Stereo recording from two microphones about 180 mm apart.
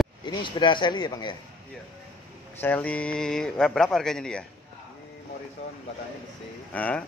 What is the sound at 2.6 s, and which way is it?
A man's voice, 10° left (ahead or behind).